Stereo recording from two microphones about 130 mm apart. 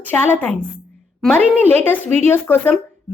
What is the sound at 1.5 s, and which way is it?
Speech, 15° left (ahead or behind).